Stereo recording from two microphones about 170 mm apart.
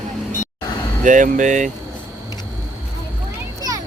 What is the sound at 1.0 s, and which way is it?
Speech, 50° right (ahead or behind).